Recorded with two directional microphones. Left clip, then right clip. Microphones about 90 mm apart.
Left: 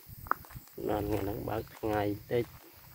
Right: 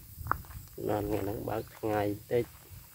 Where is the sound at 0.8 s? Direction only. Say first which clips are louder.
Right 1 dB; centre (ahead or behind).